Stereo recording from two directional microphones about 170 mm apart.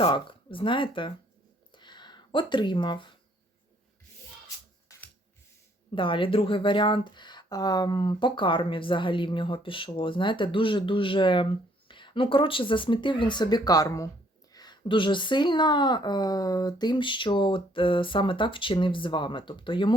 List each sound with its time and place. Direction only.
0.0 s speech: 30° left (ahead or behind)
1.7 s a sound: 25° left (ahead or behind)
5.9 s speech: 30° left (ahead or behind)